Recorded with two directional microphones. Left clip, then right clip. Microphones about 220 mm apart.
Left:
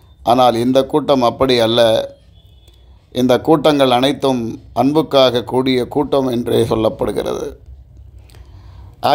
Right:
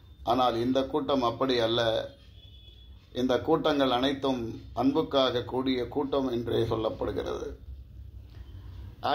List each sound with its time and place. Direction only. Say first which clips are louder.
0.2 s a man's voice: left 14 dB; 50° left (ahead or behind)
3.1 s a man's voice: left 13 dB; 50° left (ahead or behind)